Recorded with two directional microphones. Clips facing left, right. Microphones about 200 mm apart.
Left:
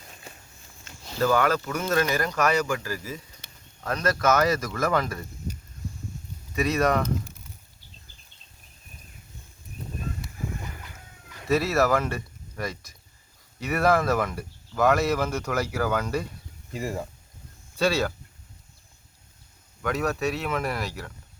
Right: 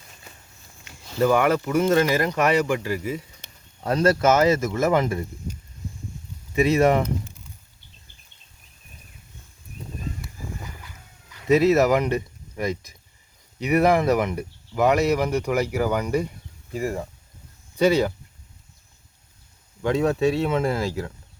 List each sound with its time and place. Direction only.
0.9 s speech: 15° right (ahead or behind)
6.6 s speech: 25° right (ahead or behind)
11.4 s speech: 20° right (ahead or behind)
17.7 s speech: 20° right (ahead or behind)
19.8 s speech: 25° right (ahead or behind)